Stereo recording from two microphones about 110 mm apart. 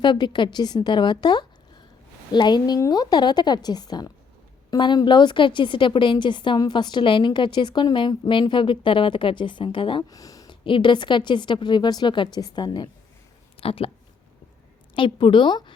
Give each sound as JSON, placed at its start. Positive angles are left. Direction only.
{"t": 0.0, "sound": "a woman's voice", "side_deg": 45}
{"t": 10.0, "sound": "a sound", "side_deg": 35}
{"t": 10.5, "sound": "a woman's voice", "side_deg": 50}
{"t": 13.6, "sound": "speech", "side_deg": 60}
{"t": 14.9, "sound": "a woman's voice", "side_deg": 50}